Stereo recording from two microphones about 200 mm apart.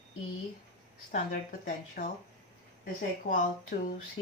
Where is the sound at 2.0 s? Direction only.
45° left (ahead or behind).